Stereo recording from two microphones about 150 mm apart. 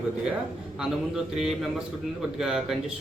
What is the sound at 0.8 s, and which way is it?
Speech, centre (ahead or behind).